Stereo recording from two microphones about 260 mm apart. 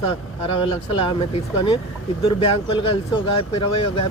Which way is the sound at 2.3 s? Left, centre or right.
Left.